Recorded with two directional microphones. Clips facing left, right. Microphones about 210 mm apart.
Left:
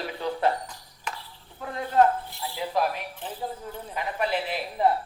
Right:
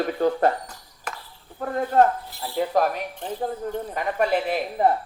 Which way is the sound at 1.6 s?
50° right (ahead or behind).